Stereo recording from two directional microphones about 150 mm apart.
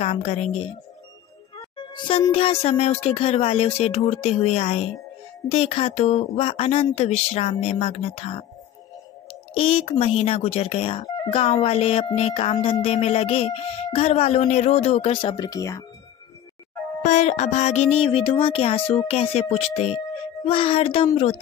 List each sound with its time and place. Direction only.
0.0 s speech: 45° left (ahead or behind)
2.0 s speech: 35° left (ahead or behind)
17.0 s speech: 50° left (ahead or behind)
17.9 s speech: 35° left (ahead or behind)